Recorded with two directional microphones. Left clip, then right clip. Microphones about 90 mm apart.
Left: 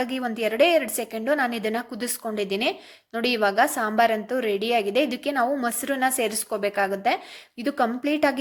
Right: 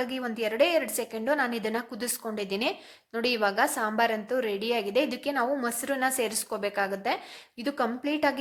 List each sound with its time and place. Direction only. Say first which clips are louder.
0.0 s a woman's voice: left 4 dB; 35° left (ahead or behind)